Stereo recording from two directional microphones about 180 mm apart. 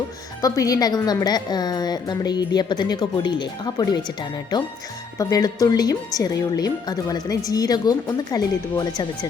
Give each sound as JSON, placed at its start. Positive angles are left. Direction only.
{"t": 0.4, "sound": "speech", "side_deg": 20}
{"t": 5.1, "sound": "speech", "side_deg": 20}